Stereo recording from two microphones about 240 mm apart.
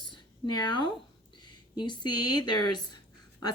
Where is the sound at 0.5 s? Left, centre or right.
Centre.